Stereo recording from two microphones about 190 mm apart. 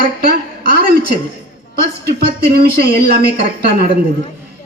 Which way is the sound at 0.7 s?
50° right (ahead or behind).